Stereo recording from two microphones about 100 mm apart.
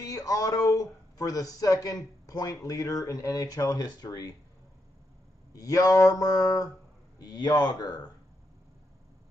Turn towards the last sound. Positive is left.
turn(degrees=45)  # may be behind; listen again after turning